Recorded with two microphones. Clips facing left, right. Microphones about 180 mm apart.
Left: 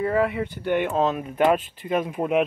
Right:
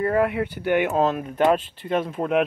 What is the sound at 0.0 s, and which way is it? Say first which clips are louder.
Speech: right 1 dB; centre (ahead or behind).